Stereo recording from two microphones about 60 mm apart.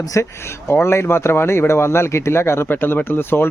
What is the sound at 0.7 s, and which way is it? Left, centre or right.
A man's voice, left.